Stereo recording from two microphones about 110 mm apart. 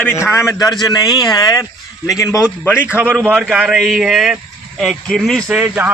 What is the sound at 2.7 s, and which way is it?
Speech, 10° right (ahead or behind).